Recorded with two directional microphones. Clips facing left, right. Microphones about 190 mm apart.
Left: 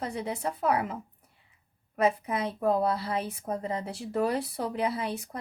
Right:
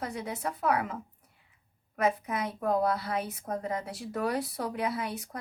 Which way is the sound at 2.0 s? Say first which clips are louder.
Left 2 dB; 30° left (ahead or behind).